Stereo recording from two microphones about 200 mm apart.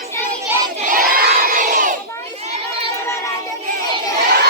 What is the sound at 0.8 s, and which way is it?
Crowd, 45° right (ahead or behind).